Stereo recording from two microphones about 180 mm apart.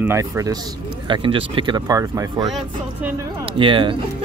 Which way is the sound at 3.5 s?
30° right (ahead or behind).